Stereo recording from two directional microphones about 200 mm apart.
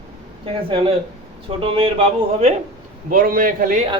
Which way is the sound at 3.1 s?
45° right (ahead or behind).